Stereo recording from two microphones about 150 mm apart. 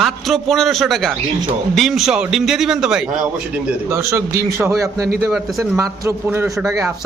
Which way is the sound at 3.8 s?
20° right (ahead or behind).